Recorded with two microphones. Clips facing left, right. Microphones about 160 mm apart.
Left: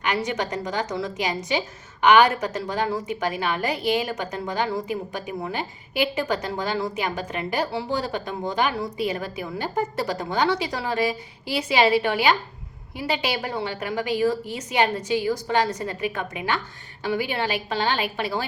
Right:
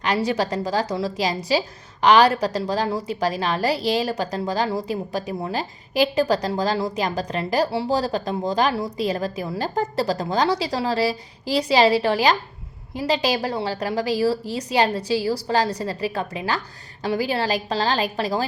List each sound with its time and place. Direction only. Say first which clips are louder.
0.0 s a woman's voice: right 4 dB; 35° right (ahead or behind)